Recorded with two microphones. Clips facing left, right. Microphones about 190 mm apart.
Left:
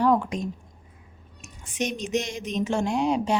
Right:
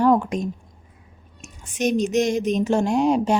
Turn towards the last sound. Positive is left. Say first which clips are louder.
# right 5 dB
turn(degrees=-45)  # may be behind; listen again after turning